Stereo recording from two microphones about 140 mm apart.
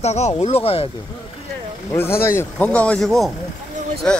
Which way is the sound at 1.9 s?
15° left (ahead or behind).